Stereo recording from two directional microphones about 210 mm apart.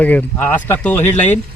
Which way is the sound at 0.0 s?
10° left (ahead or behind).